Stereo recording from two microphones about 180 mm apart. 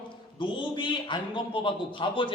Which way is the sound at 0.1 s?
25° left (ahead or behind).